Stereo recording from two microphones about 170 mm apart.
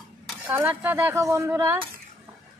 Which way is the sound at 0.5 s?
10° right (ahead or behind).